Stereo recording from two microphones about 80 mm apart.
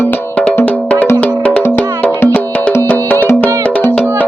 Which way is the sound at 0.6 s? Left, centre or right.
Centre.